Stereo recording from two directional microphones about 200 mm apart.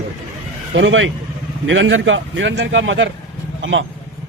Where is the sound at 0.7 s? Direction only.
70° right (ahead or behind).